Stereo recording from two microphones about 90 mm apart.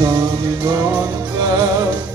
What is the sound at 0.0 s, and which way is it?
Music, 40° right (ahead or behind).